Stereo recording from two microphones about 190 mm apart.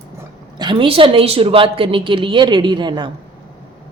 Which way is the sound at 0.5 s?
25° right (ahead or behind).